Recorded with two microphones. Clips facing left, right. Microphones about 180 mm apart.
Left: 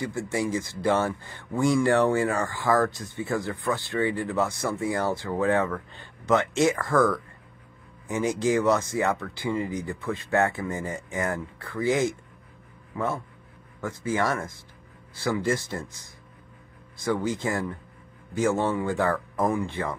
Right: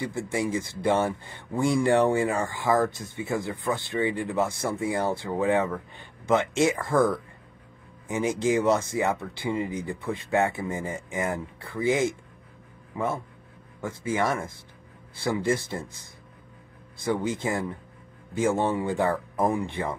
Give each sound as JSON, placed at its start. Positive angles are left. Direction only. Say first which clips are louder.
{"t": 0.0, "sound": "speech", "louder": "even", "side_deg": -20}
{"t": 8.4, "sound": "a man's voice", "louder": "even", "side_deg": -20}
{"t": 17.0, "sound": "speech", "louder": "even", "side_deg": -20}